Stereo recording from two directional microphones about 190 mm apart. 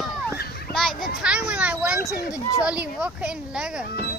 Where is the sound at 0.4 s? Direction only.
55° left (ahead or behind).